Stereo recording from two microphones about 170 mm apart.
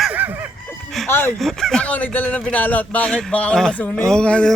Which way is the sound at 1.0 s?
Centre (ahead or behind).